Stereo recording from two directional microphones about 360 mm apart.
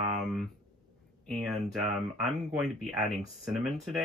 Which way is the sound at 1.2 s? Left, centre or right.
Centre.